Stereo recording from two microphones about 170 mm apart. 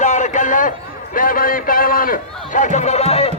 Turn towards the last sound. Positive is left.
turn(degrees=35)  # may be behind; listen again after turning